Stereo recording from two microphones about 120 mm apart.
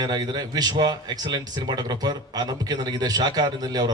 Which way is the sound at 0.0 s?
35° right (ahead or behind).